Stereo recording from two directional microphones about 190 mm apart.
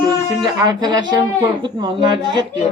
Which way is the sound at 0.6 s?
20° right (ahead or behind).